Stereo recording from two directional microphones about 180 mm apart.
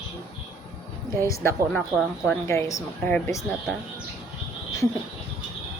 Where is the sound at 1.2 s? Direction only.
15° left (ahead or behind).